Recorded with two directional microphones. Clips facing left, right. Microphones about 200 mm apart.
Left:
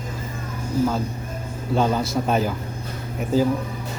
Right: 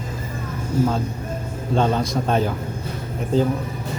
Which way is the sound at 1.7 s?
5° left (ahead or behind).